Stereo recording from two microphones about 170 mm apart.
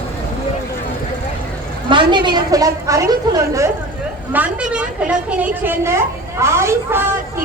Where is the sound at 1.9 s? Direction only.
30° right (ahead or behind).